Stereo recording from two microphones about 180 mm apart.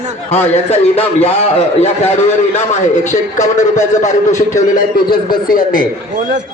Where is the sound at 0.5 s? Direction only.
35° left (ahead or behind).